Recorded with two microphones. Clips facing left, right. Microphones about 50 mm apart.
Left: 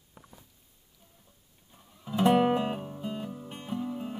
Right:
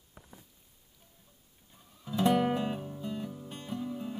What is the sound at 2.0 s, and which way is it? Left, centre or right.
Music, left.